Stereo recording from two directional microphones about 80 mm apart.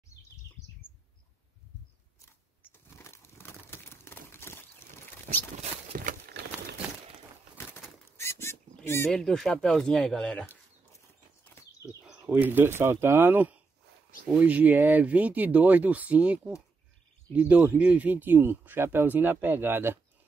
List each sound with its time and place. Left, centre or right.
2.2 s crumpling: left
8.2 s a sound: left
8.8 s speech: left
9.1 s speech: centre
12.3 s speech: right